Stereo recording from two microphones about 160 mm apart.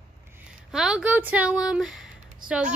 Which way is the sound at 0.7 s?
5° right (ahead or behind).